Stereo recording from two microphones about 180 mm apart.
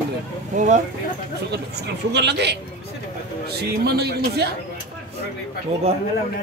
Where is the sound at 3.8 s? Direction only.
65° right (ahead or behind).